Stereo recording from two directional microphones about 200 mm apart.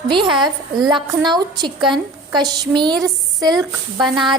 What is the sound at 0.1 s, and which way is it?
A woman's voice, 25° right (ahead or behind).